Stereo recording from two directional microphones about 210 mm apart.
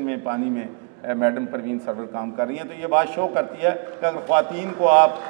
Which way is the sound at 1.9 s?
20° right (ahead or behind).